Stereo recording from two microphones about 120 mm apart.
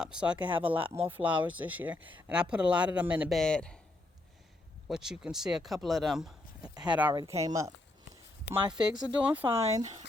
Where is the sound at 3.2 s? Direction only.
5° left (ahead or behind).